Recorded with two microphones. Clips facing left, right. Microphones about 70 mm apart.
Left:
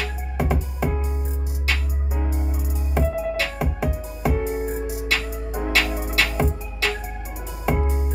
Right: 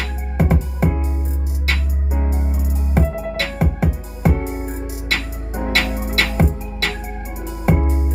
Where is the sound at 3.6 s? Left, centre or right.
Right.